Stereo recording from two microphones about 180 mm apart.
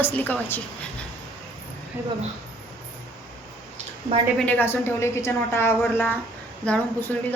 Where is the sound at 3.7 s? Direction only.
35° right (ahead or behind).